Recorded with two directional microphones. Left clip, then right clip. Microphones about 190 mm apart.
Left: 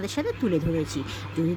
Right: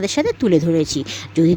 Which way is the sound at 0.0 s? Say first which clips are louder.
Right 9 dB; 40° right (ahead or behind).